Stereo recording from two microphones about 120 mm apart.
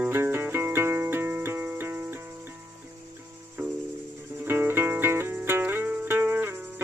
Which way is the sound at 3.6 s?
25° right (ahead or behind).